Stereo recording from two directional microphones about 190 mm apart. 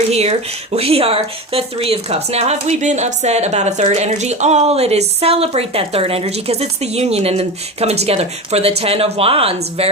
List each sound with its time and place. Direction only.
0.1 s speech: 35° right (ahead or behind)